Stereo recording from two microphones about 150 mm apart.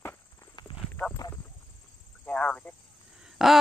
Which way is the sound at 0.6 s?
30° left (ahead or behind).